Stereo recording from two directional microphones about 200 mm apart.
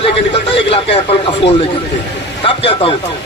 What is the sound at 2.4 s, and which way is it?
Speech, 25° left (ahead or behind).